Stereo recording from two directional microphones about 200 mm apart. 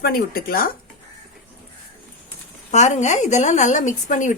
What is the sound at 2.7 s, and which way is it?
A woman's voice, 35° left (ahead or behind).